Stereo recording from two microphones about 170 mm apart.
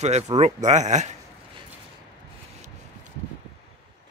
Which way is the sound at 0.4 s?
45° right (ahead or behind).